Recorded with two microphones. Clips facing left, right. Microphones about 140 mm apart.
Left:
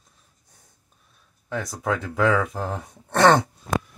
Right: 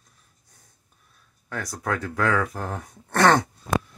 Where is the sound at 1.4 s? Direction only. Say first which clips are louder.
Left 3 dB; 20° left (ahead or behind).